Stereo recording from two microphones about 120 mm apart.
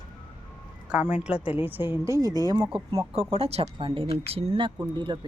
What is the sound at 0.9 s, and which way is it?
A woman's voice, 10° right (ahead or behind).